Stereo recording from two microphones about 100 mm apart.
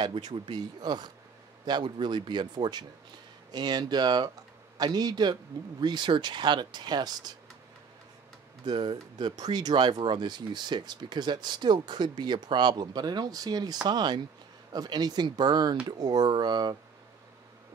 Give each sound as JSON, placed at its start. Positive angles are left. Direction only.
{"t": 0.0, "sound": "speech", "side_deg": -50}
{"t": 8.6, "sound": "speech", "side_deg": -50}